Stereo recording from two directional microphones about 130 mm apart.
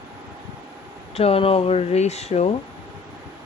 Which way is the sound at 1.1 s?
50° left (ahead or behind).